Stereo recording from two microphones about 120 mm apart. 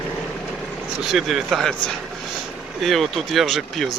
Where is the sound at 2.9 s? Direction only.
Centre (ahead or behind).